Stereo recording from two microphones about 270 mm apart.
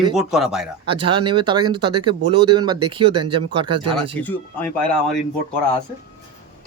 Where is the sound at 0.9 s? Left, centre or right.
Centre.